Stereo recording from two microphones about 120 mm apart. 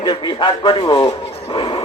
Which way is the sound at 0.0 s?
45° left (ahead or behind).